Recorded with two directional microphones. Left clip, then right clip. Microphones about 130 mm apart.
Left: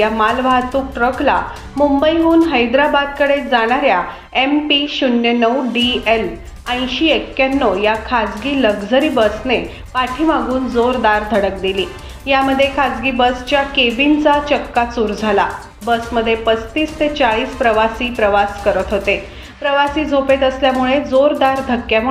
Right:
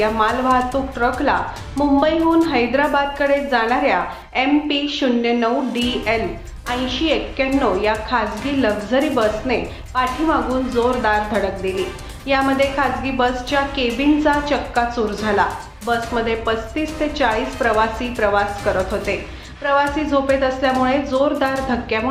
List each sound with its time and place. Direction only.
0.0 s a woman's voice: 15° left (ahead or behind)